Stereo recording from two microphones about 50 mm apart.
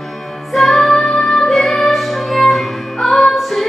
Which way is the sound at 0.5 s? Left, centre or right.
Centre.